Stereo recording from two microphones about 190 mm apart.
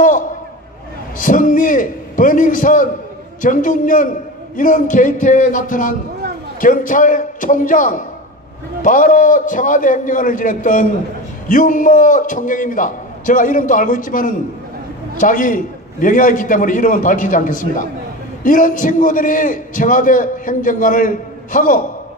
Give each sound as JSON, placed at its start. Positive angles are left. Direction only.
{"t": 1.1, "sound": "a man's voice", "side_deg": 45}